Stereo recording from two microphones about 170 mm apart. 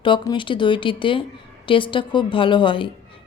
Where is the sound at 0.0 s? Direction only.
30° left (ahead or behind).